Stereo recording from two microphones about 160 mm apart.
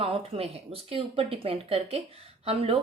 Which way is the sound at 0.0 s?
35° right (ahead or behind).